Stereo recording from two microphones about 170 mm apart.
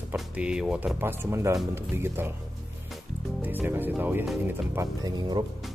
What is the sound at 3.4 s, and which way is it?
Speech, 10° right (ahead or behind).